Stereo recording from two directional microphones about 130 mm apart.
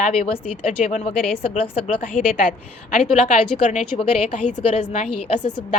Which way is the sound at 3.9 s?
60° left (ahead or behind).